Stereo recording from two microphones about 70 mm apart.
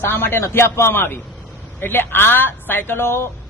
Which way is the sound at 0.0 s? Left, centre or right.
Left.